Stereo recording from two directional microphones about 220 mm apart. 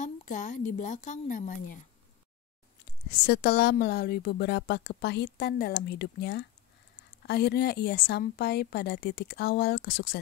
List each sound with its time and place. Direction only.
0.0 s a woman's voice: 35° left (ahead or behind)
2.8 s speech: 50° left (ahead or behind)